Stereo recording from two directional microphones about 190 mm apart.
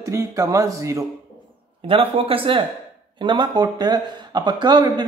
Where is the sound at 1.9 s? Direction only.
30° right (ahead or behind).